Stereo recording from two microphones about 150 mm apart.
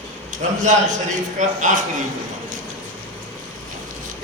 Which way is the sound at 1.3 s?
55° right (ahead or behind).